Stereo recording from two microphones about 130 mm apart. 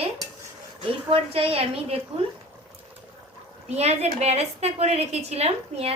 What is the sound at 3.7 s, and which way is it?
A woman's voice, 55° right (ahead or behind).